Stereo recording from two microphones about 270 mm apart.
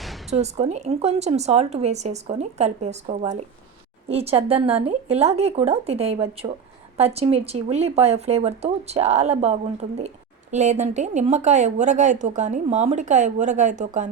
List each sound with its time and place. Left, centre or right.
0.3 s speech: right